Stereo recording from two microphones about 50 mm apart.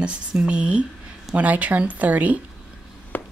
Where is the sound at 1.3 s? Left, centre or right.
Right.